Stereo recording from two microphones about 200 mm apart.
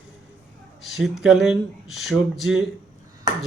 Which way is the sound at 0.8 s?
Centre (ahead or behind).